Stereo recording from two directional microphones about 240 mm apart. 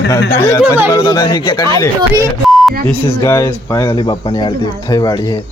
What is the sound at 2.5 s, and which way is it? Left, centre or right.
Beep, centre.